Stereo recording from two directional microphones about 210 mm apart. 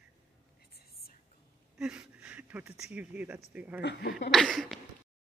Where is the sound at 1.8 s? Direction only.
5° right (ahead or behind).